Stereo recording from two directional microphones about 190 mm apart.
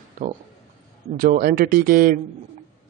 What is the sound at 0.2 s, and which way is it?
A man's voice, 45° right (ahead or behind).